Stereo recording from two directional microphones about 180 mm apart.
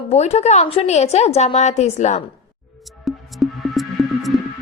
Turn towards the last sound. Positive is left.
turn(degrees=0)  # may be behind; listen again after turning